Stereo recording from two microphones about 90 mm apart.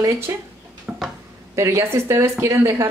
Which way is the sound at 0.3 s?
35° right (ahead or behind).